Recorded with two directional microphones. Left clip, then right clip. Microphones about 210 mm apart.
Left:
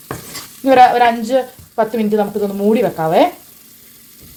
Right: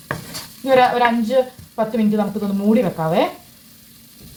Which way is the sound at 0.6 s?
50° left (ahead or behind).